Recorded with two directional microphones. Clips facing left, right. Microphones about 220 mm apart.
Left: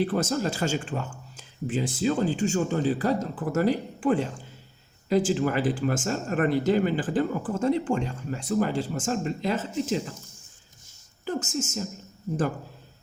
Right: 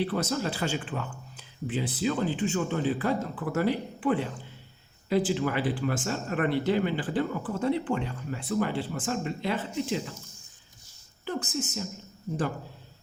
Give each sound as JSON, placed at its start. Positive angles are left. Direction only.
{"t": 0.0, "sound": "speech", "side_deg": 50}
{"t": 11.3, "sound": "speech", "side_deg": 45}